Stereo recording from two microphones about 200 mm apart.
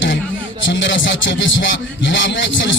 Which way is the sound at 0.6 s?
65° left (ahead or behind).